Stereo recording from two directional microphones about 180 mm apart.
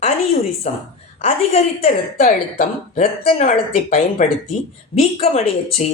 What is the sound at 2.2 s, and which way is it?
Speech, 50° left (ahead or behind).